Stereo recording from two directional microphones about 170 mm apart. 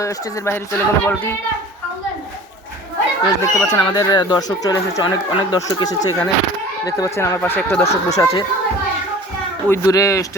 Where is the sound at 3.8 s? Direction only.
25° left (ahead or behind).